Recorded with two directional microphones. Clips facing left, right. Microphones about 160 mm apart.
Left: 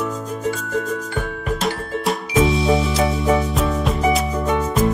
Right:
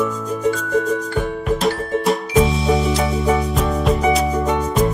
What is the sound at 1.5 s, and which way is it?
Music, centre (ahead or behind).